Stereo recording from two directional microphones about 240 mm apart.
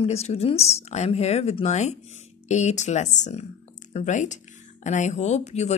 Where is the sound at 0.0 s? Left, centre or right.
Left.